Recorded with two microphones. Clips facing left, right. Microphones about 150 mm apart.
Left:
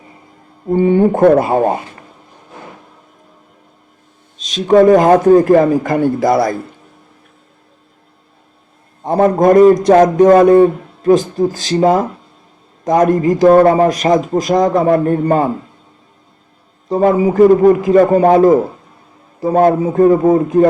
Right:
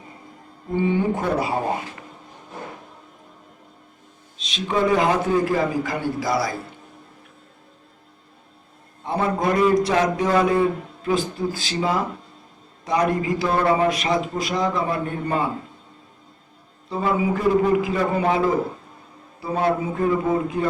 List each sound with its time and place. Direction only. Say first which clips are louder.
0.7 s a man's voice: left 10 dB; 50° left (ahead or behind)
4.4 s a man's voice: left 13 dB; 45° left (ahead or behind)
9.0 s a man's voice: left 12 dB; 45° left (ahead or behind)
16.9 s a man's voice: left 10 dB; 45° left (ahead or behind)